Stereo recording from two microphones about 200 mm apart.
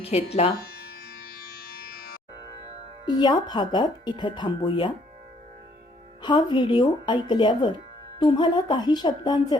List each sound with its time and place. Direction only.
0.0 s speech: 30° left (ahead or behind)
3.1 s speech: 20° left (ahead or behind)
6.2 s speech: 20° left (ahead or behind)